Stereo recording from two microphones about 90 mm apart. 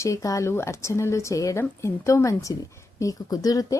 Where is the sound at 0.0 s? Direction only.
35° left (ahead or behind).